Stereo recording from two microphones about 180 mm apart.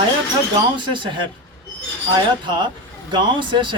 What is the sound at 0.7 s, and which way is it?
Speech, 25° right (ahead or behind).